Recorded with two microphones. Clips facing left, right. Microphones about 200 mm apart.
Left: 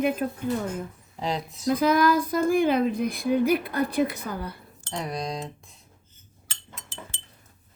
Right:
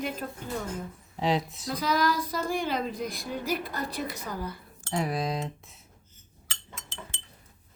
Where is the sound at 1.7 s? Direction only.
55° left (ahead or behind).